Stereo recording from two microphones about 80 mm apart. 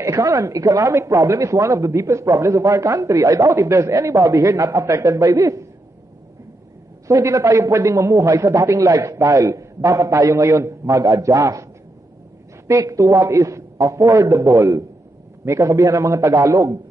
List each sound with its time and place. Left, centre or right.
0.0 s a man's voice: right
7.1 s a man's voice: right
12.6 s a man's voice: right